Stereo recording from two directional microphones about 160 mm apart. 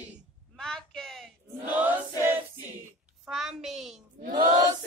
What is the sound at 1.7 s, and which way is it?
Choir, 10° right (ahead or behind).